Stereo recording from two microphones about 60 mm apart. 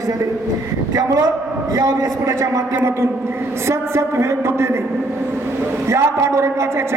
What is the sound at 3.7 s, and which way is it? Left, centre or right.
A man's voice, right.